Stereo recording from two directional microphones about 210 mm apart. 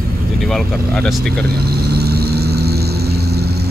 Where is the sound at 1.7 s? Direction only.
50° right (ahead or behind).